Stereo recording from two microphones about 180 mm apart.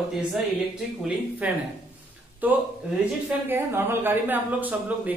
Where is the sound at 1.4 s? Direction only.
5° right (ahead or behind).